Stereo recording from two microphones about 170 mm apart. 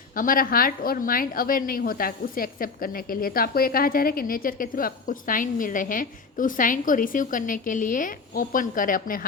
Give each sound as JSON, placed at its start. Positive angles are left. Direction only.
{"t": 0.2, "sound": "a woman's voice", "side_deg": 55}